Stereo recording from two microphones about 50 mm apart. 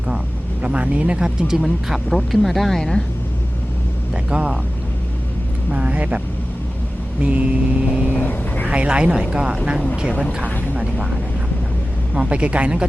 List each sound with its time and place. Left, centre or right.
0.6 s speech: right
1.5 s speech: centre
4.1 s speech: centre
5.7 s speech: right
8.0 s vehicle: left
8.6 s speech: right
12.1 s speech: centre